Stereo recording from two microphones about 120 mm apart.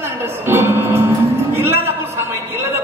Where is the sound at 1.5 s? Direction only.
20° right (ahead or behind).